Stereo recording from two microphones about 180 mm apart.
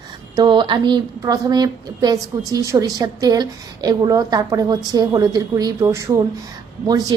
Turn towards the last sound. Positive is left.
turn(degrees=-20)  # may be behind; listen again after turning